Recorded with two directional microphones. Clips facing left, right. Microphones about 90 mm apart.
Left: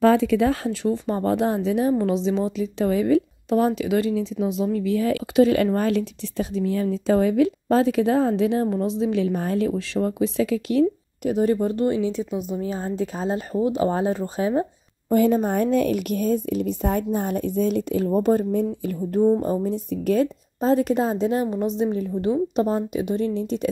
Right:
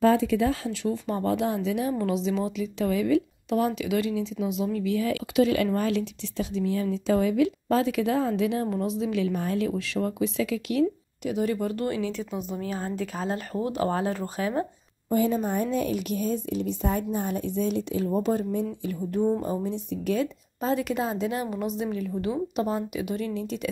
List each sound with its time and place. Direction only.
0.0 s speech: 75° left (ahead or behind)
0.7 s speech: 40° left (ahead or behind); by 14.7 s 25° left (ahead or behind)
15.0 s a woman's voice: 55° left (ahead or behind); by 23.7 s 35° left (ahead or behind)